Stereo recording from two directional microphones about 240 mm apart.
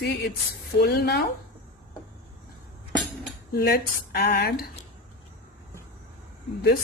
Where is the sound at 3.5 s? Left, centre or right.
Left.